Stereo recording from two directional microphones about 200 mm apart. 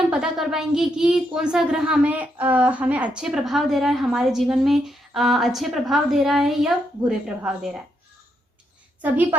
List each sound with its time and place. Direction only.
0.1 s a child's voice: 5° right (ahead or behind)